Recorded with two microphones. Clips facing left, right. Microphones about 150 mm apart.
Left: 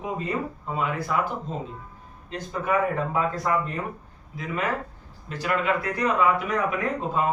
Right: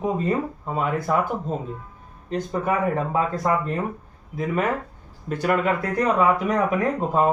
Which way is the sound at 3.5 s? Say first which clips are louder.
Right 3 dB; 30° right (ahead or behind).